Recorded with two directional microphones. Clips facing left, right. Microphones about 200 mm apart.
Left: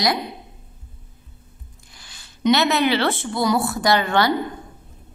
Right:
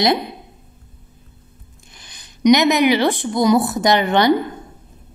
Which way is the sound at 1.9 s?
20° right (ahead or behind).